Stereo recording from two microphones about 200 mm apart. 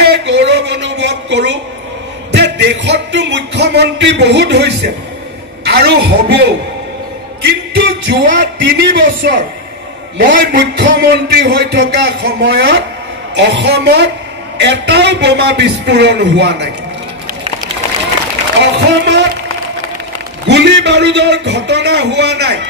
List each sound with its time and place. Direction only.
0.0 s a sound: 55° right (ahead or behind)
2.3 s music: 60° right (ahead or behind)
5.6 s a woman's voice: 55° right (ahead or behind)
7.4 s music: 55° right (ahead or behind)
8.6 s a man's voice: 55° right (ahead or behind)
18.6 s a sound: 60° right (ahead or behind)
20.4 s a man's voice: 60° right (ahead or behind)